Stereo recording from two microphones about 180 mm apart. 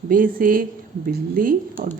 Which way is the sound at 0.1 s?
50° right (ahead or behind).